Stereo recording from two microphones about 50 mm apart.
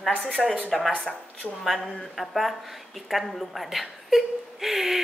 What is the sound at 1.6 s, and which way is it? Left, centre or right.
Speech, centre.